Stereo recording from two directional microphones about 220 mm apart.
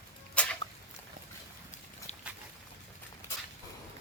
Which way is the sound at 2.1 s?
30° left (ahead or behind).